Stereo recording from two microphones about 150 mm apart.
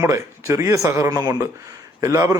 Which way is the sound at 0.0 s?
20° right (ahead or behind).